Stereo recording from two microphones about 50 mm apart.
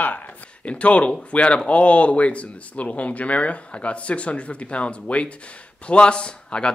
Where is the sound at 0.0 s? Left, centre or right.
Left.